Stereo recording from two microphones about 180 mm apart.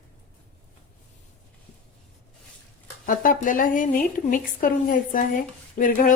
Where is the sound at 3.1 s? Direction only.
50° left (ahead or behind).